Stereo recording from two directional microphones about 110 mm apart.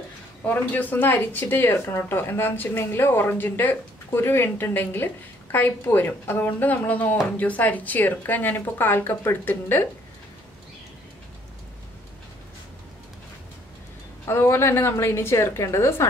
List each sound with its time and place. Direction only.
0.5 s a woman's voice: 15° left (ahead or behind)
14.2 s speech: 25° left (ahead or behind)